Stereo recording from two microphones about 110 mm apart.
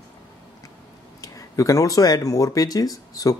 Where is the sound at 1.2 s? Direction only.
30° left (ahead or behind).